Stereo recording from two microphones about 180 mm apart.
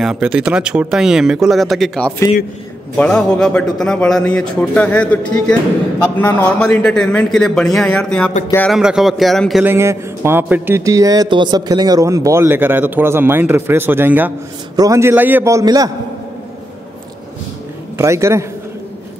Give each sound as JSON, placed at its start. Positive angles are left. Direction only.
{"t": 0.0, "sound": "speech", "side_deg": -5}
{"t": 8.7, "sound": "speech", "side_deg": -5}
{"t": 9.7, "sound": "a man's voice", "side_deg": -15}
{"t": 17.9, "sound": "a man's voice", "side_deg": -15}